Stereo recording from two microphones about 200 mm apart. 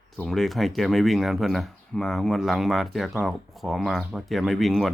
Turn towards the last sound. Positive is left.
turn(degrees=0)  # may be behind; listen again after turning